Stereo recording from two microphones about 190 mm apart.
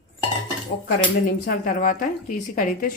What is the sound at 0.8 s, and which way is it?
A woman's voice, 50° left (ahead or behind).